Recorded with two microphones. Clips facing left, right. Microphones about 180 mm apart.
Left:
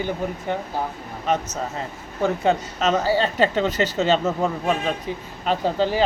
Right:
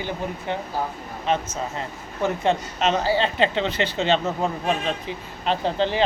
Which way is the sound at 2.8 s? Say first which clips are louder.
Left 1 dB; 45° left (ahead or behind).